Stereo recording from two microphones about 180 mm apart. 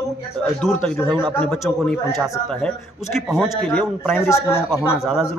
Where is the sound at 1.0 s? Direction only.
25° right (ahead or behind).